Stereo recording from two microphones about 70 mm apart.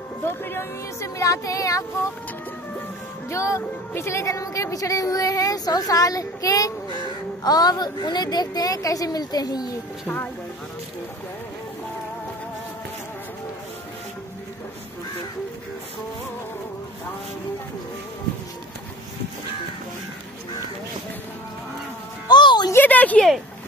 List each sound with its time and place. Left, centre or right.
0.2 s speech: left
1.0 s speech: left
3.3 s a woman's voice: left
7.4 s a woman's voice: left
10.0 s speech: left
22.3 s music: left
22.8 s a sound: left